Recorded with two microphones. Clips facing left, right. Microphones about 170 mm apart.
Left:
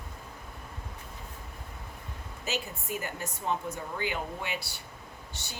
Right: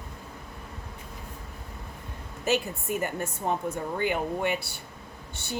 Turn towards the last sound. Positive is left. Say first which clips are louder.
# right 6 dB
turn(degrees=-55)  # may be behind; listen again after turning